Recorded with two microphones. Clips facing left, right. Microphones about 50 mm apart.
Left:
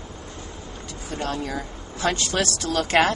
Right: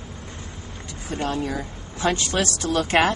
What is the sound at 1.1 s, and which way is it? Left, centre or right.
Speech, centre.